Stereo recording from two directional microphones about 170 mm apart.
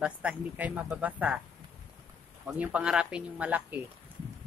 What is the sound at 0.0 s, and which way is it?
Speech, 10° right (ahead or behind).